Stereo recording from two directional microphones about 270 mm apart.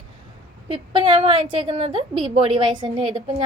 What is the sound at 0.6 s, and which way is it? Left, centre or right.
A woman's voice, centre.